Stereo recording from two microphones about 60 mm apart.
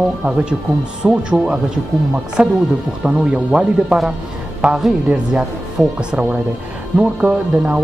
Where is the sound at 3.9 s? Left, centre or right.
Centre.